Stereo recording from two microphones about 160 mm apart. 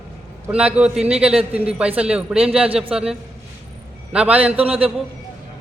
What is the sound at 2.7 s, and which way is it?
Speech, 35° right (ahead or behind).